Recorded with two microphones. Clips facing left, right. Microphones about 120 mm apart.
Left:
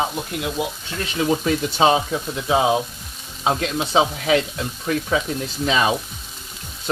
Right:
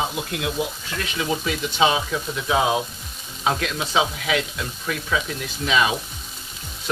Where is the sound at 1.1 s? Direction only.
40° left (ahead or behind).